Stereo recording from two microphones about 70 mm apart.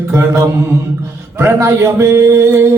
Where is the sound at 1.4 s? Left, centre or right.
Right.